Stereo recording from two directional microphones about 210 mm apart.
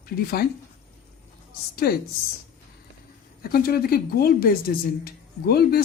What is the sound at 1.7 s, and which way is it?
Speech, 45° left (ahead or behind).